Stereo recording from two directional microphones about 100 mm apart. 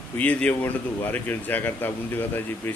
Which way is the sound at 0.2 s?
15° left (ahead or behind).